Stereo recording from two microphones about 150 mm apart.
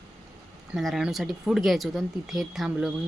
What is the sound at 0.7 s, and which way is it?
Speech, centre (ahead or behind).